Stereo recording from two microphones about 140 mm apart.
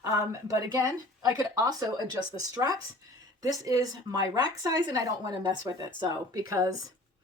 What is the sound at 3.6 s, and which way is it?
Speech, 25° right (ahead or behind).